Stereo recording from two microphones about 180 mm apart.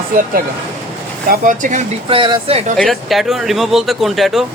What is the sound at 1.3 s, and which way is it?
Speech, 45° right (ahead or behind).